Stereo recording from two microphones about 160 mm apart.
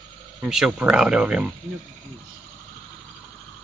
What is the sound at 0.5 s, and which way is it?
Speech, 5° right (ahead or behind).